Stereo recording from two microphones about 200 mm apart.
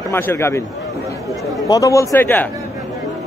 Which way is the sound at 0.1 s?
10° left (ahead or behind).